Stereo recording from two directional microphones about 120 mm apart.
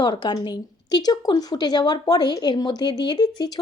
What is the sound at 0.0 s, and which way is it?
Speech, 40° left (ahead or behind).